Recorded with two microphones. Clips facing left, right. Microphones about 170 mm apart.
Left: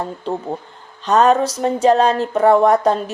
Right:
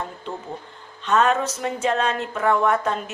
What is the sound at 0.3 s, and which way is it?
Speech, 35° left (ahead or behind).